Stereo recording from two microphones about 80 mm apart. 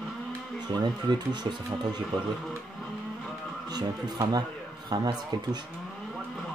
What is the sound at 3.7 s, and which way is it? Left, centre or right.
Speech, right.